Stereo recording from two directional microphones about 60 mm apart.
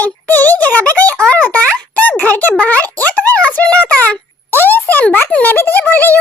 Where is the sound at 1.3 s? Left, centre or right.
Left.